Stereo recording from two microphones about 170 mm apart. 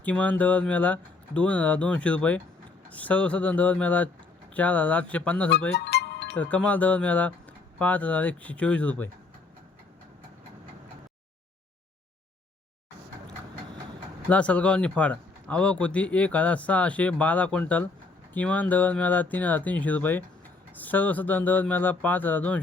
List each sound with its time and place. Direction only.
0.0 s a man's voice: 10° left (ahead or behind)
5.7 s music: 75° left (ahead or behind)
6.3 s a man's voice: 10° left (ahead or behind)
14.3 s a man's voice: 10° left (ahead or behind)